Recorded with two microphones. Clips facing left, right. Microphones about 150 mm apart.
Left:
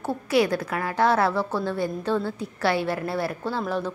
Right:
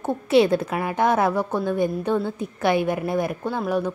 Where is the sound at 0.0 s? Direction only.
25° right (ahead or behind).